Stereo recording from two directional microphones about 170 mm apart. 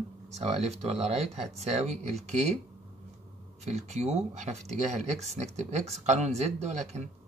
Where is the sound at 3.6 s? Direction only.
40° right (ahead or behind).